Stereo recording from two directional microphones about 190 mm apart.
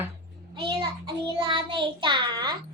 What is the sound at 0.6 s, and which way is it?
Child singing, 25° right (ahead or behind).